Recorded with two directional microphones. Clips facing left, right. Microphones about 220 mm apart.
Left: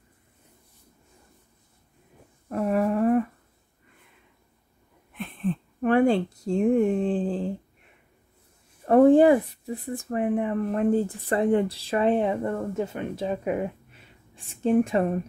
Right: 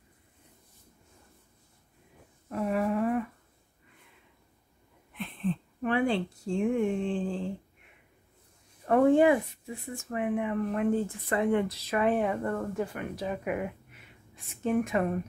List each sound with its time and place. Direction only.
2.5 s a sound: 45° left (ahead or behind)
5.1 s speech: 50° left (ahead or behind)
8.8 s speech: 35° left (ahead or behind)